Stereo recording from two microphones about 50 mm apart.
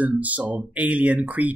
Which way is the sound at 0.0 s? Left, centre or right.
Right.